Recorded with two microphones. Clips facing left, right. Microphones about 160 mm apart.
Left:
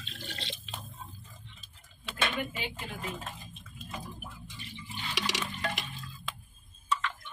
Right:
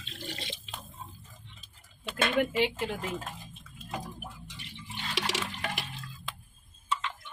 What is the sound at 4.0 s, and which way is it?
Water, 75° right (ahead or behind).